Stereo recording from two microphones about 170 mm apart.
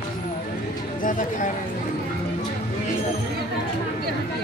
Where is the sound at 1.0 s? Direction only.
50° left (ahead or behind).